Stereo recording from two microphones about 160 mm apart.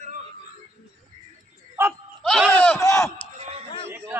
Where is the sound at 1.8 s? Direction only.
15° right (ahead or behind).